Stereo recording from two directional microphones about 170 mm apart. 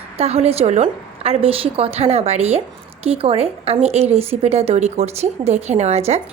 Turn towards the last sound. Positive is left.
turn(degrees=-40)  # may be behind; listen again after turning